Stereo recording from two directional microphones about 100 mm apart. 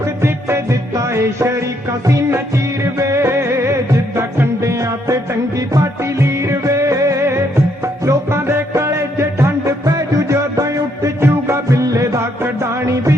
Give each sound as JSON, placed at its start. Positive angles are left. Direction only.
{"t": 0.0, "sound": "music", "side_deg": -25}